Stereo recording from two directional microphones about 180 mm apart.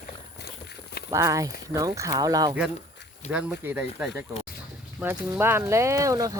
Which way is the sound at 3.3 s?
10° right (ahead or behind).